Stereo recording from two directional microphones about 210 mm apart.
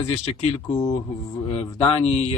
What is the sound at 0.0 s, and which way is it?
Speech, 30° left (ahead or behind).